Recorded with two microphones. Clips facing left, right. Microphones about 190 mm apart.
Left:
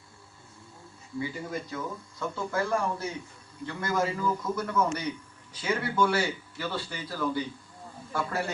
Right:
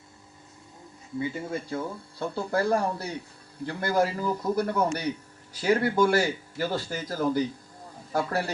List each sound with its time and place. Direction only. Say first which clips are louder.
1.2 s speech: right 3 dB; 25° right (ahead or behind)